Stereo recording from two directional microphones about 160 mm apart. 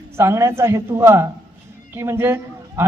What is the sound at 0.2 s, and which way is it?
A woman's voice, 15° right (ahead or behind).